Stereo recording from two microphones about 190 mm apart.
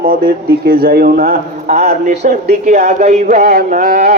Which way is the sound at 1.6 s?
35° right (ahead or behind).